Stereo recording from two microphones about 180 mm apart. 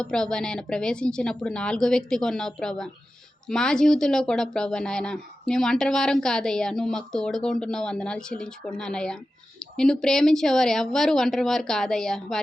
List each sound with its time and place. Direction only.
0.0 s speech: 5° left (ahead or behind)